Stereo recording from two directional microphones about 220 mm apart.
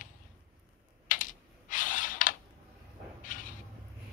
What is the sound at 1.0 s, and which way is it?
Computer keyboard, 35° left (ahead or behind).